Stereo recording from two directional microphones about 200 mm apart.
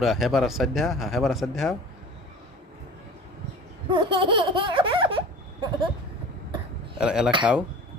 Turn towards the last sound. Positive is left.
turn(degrees=-5)  # may be behind; listen again after turning